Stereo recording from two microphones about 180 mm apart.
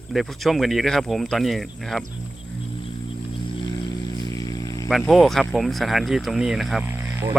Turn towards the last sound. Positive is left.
turn(degrees=-15)  # may be behind; listen again after turning